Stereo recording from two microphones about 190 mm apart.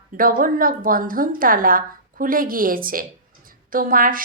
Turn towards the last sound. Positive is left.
turn(degrees=-45)  # may be behind; listen again after turning